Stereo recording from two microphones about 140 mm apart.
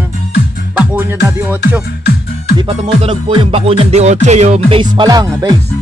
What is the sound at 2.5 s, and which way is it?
Music, 40° right (ahead or behind).